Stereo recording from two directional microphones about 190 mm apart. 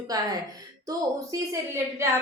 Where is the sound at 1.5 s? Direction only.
15° right (ahead or behind).